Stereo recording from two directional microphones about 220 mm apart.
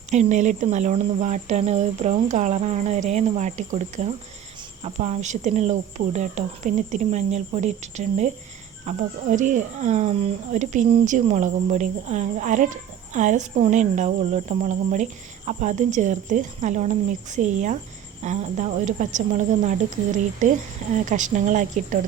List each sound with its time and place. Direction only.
0.1 s speech: 30° right (ahead or behind)